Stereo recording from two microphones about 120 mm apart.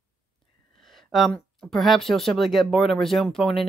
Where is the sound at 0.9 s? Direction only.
Centre (ahead or behind).